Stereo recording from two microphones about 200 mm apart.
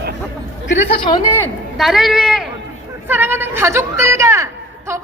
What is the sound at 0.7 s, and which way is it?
Speech, 30° left (ahead or behind).